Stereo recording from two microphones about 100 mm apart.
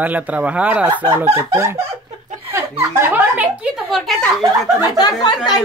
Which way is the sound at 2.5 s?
25° right (ahead or behind).